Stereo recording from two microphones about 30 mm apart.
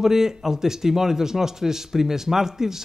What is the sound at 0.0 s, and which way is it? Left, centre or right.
Speech, centre.